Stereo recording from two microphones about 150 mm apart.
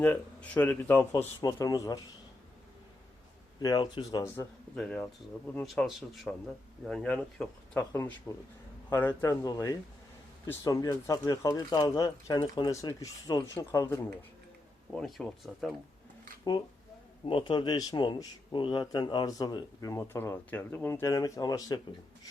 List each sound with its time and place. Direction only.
0.0 s speech: 10° left (ahead or behind)
1.4 s a man's voice: 25° left (ahead or behind)
3.6 s a man's voice: 30° left (ahead or behind)
4.8 s a man's voice: 5° left (ahead or behind)
14.9 s speech: 5° left (ahead or behind)
16.4 s a man's voice: 30° left (ahead or behind)